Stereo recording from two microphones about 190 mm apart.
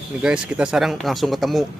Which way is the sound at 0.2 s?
5° right (ahead or behind).